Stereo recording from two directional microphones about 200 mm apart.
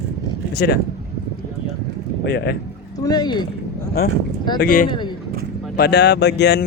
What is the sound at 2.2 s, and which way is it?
Speech, 50° left (ahead or behind).